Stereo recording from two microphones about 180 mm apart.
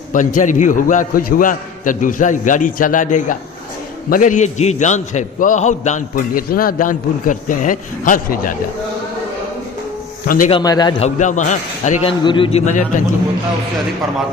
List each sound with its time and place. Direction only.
0.1 s a man's voice: 45° left (ahead or behind)
10.2 s a man's voice: 50° left (ahead or behind)
10.5 s a man's voice: 20° left (ahead or behind)
11.0 s a man's voice: 45° left (ahead or behind)
12.2 s a man's voice: 30° left (ahead or behind)